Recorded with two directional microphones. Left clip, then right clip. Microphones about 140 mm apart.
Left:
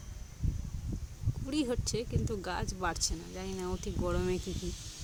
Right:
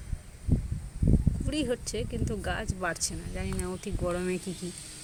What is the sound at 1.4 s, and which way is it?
Speech, 15° left (ahead or behind).